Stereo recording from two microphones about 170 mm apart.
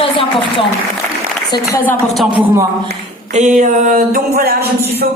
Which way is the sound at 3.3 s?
45° right (ahead or behind).